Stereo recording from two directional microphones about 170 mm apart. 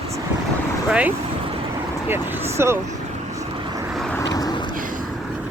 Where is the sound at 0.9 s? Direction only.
10° right (ahead or behind).